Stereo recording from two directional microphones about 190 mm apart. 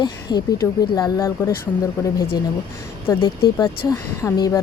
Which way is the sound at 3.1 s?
15° left (ahead or behind).